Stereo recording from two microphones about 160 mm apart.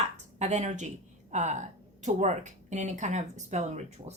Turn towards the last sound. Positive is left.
turn(degrees=-45)  # may be behind; listen again after turning